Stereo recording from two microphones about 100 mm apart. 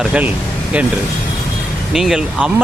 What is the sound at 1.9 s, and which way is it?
Speech, 5° right (ahead or behind).